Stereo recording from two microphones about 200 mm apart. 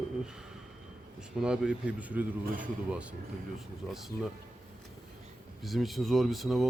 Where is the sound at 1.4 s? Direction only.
5° right (ahead or behind).